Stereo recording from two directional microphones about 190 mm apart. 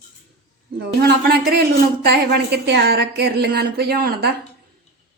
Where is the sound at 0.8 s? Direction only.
60° right (ahead or behind).